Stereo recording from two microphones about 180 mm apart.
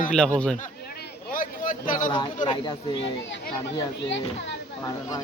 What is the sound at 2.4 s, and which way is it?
Speech, 25° left (ahead or behind).